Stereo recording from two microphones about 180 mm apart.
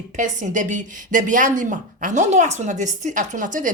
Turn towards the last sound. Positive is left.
turn(degrees=-45)  # may be behind; listen again after turning